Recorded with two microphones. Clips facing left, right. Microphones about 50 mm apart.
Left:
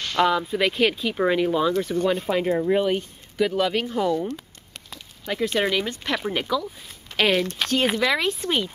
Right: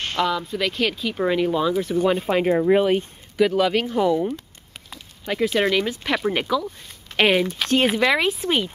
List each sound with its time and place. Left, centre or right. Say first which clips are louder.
0.3 s speech: left 2 dB; centre
2.0 s speech: right 4 dB; centre
3.3 s speech: right 3 dB; centre
6.1 s speech: right 3 dB; centre
7.5 s speech: right 3 dB; centre